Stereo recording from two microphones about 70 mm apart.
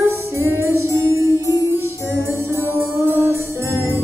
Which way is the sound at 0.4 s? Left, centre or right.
Right.